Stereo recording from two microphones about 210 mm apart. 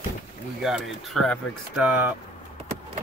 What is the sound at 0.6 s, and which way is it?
Speech, centre (ahead or behind).